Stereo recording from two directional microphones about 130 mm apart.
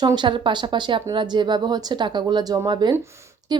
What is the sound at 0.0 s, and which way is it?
A woman's voice, 35° right (ahead or behind).